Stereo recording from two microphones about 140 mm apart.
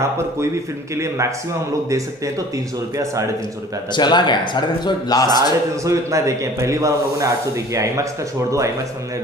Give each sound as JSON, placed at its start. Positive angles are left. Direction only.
{"t": 0.9, "sound": "speech", "side_deg": -20}
{"t": 3.9, "sound": "a man's voice", "side_deg": 30}
{"t": 5.9, "sound": "speech", "side_deg": -20}